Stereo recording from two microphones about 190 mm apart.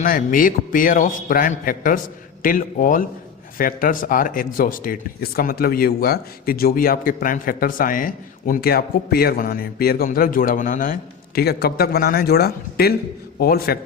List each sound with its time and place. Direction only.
0.0 s speech: 45° left (ahead or behind)
11.3 s a man's voice: 55° left (ahead or behind)